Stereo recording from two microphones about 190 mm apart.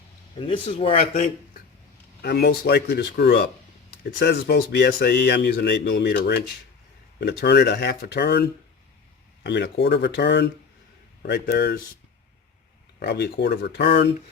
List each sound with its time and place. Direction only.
0.3 s speech: 25° left (ahead or behind)
1.1 s speech: 45° left (ahead or behind)
2.2 s speech: 60° left (ahead or behind)
13.0 s speech: 60° left (ahead or behind)